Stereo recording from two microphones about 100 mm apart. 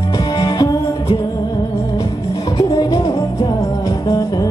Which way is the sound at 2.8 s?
50° left (ahead or behind).